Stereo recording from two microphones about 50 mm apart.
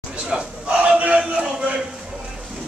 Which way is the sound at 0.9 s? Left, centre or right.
Right.